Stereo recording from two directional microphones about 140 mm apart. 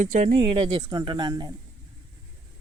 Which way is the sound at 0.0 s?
70° right (ahead or behind).